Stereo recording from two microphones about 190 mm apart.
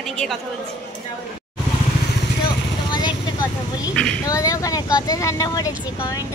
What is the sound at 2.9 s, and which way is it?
Vehicle, 25° left (ahead or behind).